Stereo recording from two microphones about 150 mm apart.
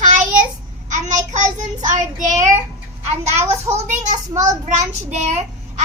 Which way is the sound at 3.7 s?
55° right (ahead or behind).